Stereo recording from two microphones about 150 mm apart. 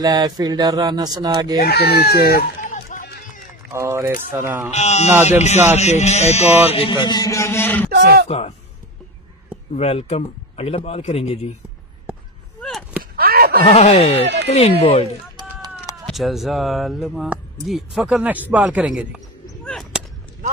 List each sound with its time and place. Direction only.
0.0 s speech: 25° right (ahead or behind)
1.6 s speech: 90° left
2.2 s run: 80° left
3.7 s speech: 15° right (ahead or behind)
4.7 s a man's voice: 50° left (ahead or behind)
6.7 s a man's voice: 35° left (ahead or behind); by 7.9 s 15° left (ahead or behind)
7.9 s speech: 90° right
8.3 s a man's voice: 45° left (ahead or behind)
9.7 s a man's voice: 45° left (ahead or behind)
13.1 s a sound: 90° right
13.7 s a man's voice: 45° left (ahead or behind)
15.3 s run: 25° right (ahead or behind)
16.1 s speech: centre (ahead or behind)
19.6 s whip: centre (ahead or behind)